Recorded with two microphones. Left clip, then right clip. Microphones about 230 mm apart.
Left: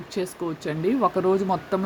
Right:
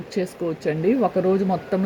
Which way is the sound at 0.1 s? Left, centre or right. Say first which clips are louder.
Right 3 dB; centre.